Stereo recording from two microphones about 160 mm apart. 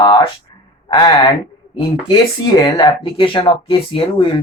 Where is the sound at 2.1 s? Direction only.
25° left (ahead or behind).